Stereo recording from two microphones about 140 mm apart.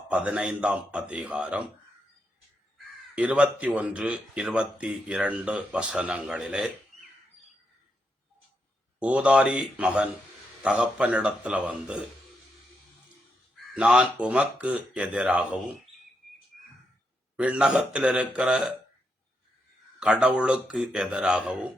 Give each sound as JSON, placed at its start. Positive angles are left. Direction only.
{"t": 0.1, "sound": "speech", "side_deg": -10}
{"t": 3.2, "sound": "speech", "side_deg": -10}
{"t": 9.0, "sound": "speech", "side_deg": -10}
{"t": 13.7, "sound": "speech", "side_deg": -10}
{"t": 17.3, "sound": "speech", "side_deg": -10}
{"t": 20.0, "sound": "speech", "side_deg": -5}